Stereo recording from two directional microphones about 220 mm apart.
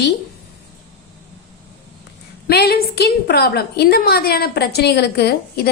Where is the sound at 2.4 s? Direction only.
45° left (ahead or behind).